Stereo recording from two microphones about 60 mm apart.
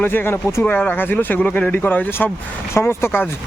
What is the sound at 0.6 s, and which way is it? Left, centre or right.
Speech, left.